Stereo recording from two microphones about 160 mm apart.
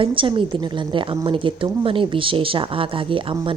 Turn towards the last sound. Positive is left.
turn(degrees=-30)  # may be behind; listen again after turning